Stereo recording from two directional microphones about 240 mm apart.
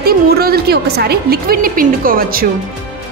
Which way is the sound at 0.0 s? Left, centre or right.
Right.